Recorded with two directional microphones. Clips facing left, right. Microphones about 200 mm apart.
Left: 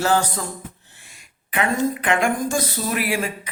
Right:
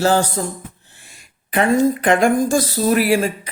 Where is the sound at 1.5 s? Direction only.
40° right (ahead or behind).